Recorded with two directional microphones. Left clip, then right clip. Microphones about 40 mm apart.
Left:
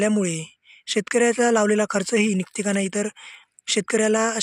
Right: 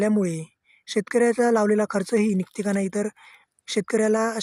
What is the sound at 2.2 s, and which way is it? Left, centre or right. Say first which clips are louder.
Speech: left 3 dB; left.